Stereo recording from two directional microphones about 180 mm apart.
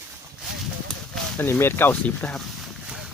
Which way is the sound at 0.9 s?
10° left (ahead or behind).